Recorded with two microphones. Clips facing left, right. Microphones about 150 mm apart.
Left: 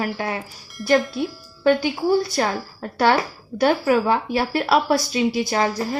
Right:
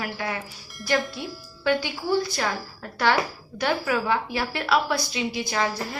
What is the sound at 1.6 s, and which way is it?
A woman's voice, 40° left (ahead or behind).